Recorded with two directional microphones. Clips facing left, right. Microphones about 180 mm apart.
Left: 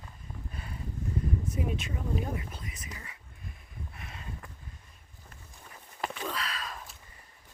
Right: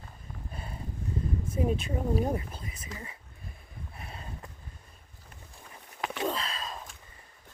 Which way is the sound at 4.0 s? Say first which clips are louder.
Right 3 dB; 35° right (ahead or behind).